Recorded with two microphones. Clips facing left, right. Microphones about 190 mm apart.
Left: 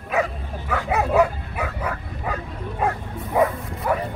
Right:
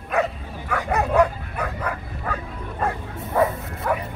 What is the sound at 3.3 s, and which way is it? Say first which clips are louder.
Bow-wow: left 1 dB; 15° left (ahead or behind).